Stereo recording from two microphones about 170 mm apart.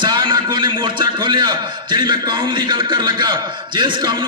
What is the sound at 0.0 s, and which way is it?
A man's voice, 25° right (ahead or behind).